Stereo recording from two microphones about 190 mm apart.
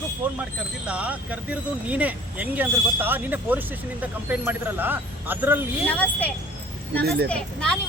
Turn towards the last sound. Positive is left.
turn(degrees=5)  # may be behind; listen again after turning